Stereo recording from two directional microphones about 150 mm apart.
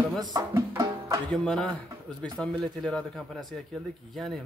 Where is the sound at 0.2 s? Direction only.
25° right (ahead or behind).